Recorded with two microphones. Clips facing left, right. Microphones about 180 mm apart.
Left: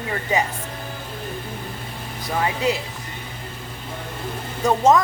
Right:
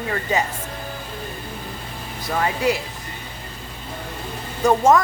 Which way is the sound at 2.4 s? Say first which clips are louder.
Right 1 dB; 20° left (ahead or behind).